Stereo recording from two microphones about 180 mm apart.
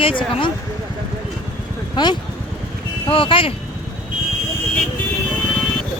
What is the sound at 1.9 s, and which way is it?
Speech, 25° left (ahead or behind).